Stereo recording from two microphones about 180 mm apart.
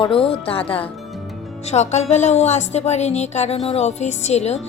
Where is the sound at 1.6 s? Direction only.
40° left (ahead or behind).